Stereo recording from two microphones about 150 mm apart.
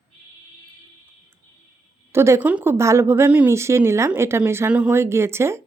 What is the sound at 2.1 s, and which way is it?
Speech, 20° right (ahead or behind).